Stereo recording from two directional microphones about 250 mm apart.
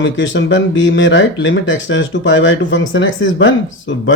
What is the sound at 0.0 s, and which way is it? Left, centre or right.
Speech, left.